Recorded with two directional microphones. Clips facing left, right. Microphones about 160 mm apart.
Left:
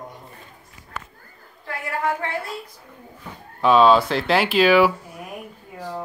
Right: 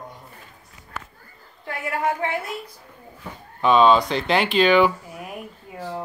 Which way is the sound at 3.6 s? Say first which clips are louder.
Left 1 dB; centre (ahead or behind).